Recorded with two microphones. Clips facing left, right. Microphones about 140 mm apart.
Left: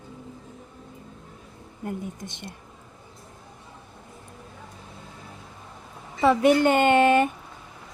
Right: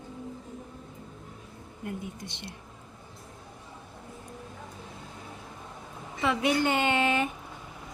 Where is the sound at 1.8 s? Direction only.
45° left (ahead or behind).